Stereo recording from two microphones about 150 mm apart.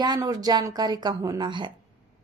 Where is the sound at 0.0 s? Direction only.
25° right (ahead or behind).